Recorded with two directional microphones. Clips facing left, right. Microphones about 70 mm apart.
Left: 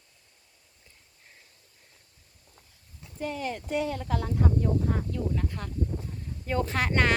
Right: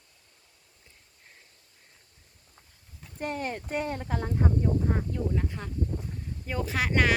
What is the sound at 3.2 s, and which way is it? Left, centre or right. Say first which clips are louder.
Speech: even; right.